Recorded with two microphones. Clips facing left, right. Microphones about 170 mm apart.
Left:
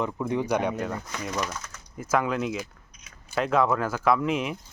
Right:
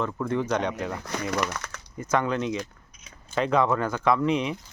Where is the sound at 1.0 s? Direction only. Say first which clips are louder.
Right 3 dB; 70° right (ahead or behind).